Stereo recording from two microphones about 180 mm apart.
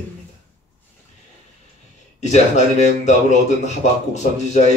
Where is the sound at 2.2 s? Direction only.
40° left (ahead or behind).